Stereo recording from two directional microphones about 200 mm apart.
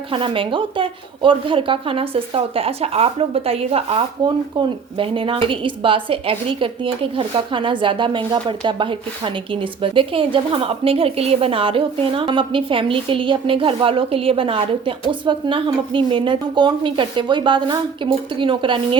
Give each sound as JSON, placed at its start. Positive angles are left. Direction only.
{"t": 0.1, "sound": "speech", "side_deg": -25}